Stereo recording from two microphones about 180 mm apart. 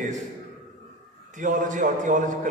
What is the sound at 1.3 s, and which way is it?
A man's voice, 45° right (ahead or behind).